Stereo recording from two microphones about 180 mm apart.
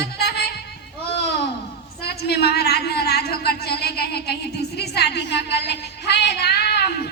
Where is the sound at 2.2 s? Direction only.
65° left (ahead or behind).